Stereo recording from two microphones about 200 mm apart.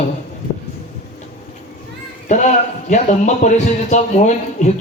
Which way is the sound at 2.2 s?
35° left (ahead or behind).